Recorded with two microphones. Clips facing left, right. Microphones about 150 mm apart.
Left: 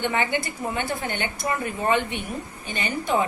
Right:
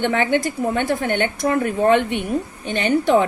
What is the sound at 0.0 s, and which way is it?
A woman's voice, 60° right (ahead or behind).